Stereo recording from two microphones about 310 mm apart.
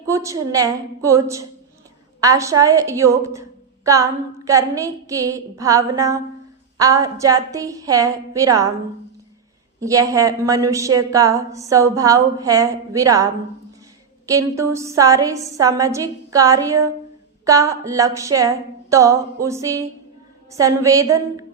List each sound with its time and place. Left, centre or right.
0.0 s a woman's voice: centre
9.8 s a woman's voice: centre